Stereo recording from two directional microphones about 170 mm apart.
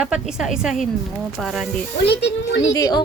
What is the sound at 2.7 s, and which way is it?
Speech, 20° left (ahead or behind).